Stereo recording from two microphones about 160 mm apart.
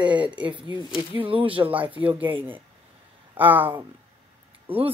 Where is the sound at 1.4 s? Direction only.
35° right (ahead or behind).